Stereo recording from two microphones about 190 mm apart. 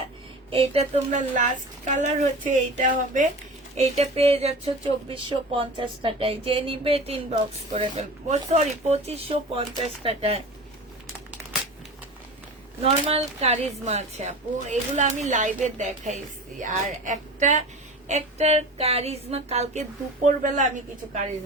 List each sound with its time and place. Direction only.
0.5 s speech: 35° right (ahead or behind)
12.8 s a woman's voice: 35° right (ahead or behind)